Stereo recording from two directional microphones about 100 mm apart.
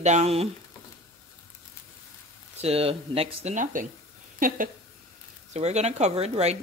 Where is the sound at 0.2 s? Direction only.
90° right.